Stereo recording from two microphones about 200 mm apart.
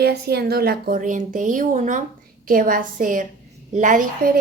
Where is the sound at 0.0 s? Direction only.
55° right (ahead or behind).